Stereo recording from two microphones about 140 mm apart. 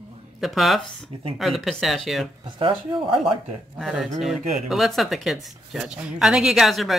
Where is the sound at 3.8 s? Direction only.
Centre (ahead or behind).